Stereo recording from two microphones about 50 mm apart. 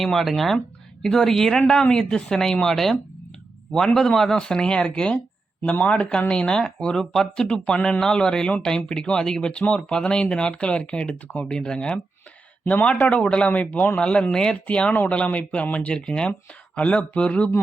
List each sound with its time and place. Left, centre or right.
0.0 s speech: centre
7.0 s speech: centre
11.3 s speech: centre; by 17.5 s left